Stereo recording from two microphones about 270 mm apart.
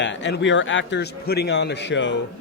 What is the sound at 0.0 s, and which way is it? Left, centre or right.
A man's voice, left.